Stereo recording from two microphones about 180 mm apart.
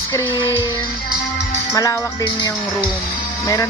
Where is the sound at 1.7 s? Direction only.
20° left (ahead or behind).